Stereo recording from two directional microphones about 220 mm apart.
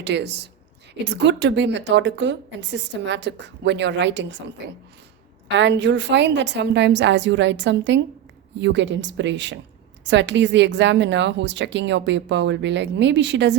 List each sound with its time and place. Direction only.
0.0 s a woman's voice: 50° right (ahead or behind)
5.5 s a woman's voice: 55° right (ahead or behind)